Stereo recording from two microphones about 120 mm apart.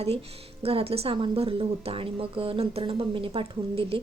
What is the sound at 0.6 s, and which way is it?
Speech, 55° right (ahead or behind).